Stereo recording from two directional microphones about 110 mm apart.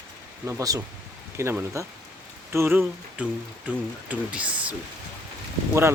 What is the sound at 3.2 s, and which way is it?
Speech, 10° right (ahead or behind).